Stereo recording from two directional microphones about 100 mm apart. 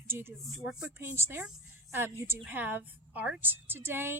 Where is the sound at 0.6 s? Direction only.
5° right (ahead or behind).